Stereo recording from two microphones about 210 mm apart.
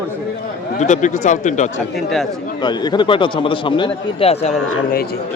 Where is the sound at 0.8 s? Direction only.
35° left (ahead or behind).